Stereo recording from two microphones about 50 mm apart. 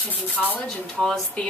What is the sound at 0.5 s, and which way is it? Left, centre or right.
Speech, centre.